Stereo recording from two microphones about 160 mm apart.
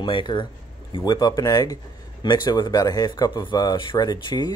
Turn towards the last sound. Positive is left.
turn(degrees=25)  # may be behind; listen again after turning